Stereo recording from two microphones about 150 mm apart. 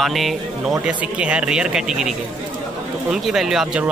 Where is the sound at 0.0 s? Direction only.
Centre (ahead or behind).